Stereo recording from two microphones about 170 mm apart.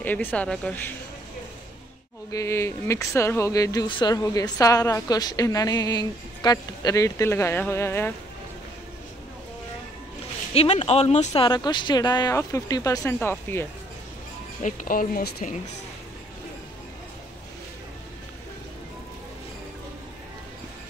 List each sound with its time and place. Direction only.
0.0 s speech: 10° left (ahead or behind)
2.3 s speech: 15° left (ahead or behind)
10.5 s speech: 35° left (ahead or behind)
11.4 s speech: 25° left (ahead or behind)
14.6 s speech: 50° left (ahead or behind)